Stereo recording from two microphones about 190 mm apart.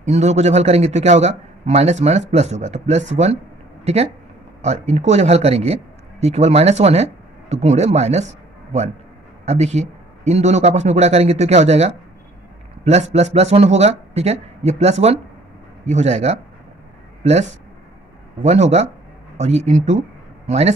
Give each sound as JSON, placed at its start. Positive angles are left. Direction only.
{"t": 0.0, "sound": "a man's voice", "side_deg": -35}